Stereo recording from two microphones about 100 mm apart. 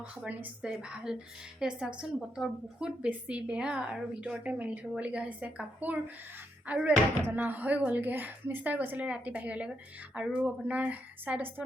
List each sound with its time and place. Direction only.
0.0 s a woman's voice: 10° right (ahead or behind)